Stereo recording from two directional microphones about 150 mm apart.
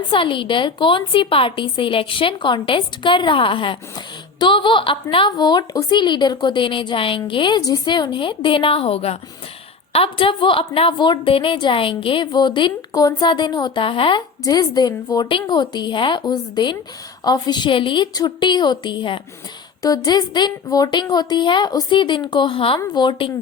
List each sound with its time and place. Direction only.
0.1 s a woman's voice: 35° left (ahead or behind)
14.4 s a woman's voice: 25° left (ahead or behind)